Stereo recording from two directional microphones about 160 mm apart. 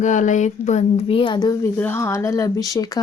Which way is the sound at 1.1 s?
30° left (ahead or behind).